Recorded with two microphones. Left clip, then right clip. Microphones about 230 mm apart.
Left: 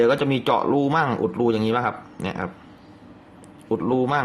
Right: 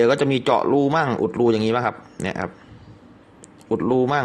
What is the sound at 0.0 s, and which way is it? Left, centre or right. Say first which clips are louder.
Speech: right 2 dB; right.